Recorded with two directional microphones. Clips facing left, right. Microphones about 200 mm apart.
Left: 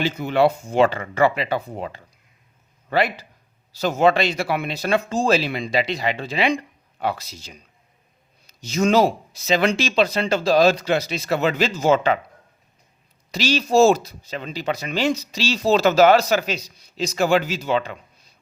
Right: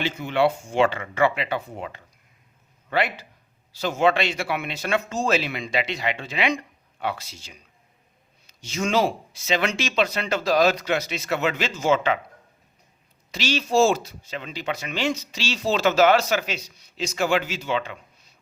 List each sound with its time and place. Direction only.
0.0 s speech: 40° left (ahead or behind)
13.3 s speech: 40° left (ahead or behind)